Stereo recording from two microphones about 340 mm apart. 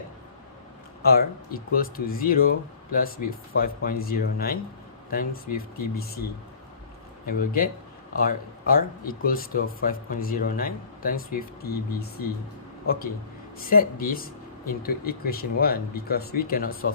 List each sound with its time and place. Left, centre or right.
1.0 s speech: left
7.3 s speech: left